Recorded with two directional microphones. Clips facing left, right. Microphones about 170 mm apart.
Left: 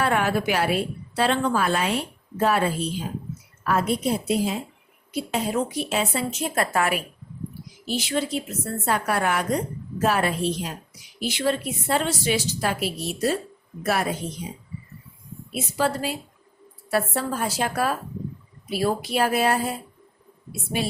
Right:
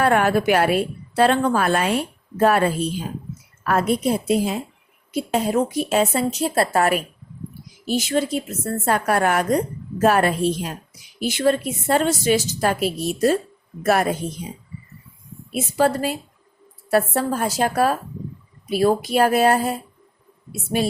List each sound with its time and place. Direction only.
0.0 s a woman's voice: 50° right (ahead or behind)
15.5 s a woman's voice: 45° right (ahead or behind)